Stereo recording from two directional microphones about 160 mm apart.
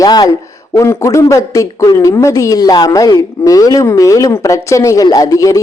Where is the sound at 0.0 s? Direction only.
25° left (ahead or behind).